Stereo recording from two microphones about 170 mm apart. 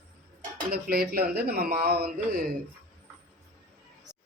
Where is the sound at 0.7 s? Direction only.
65° right (ahead or behind).